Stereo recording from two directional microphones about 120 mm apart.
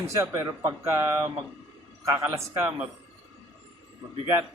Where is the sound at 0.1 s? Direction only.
25° right (ahead or behind).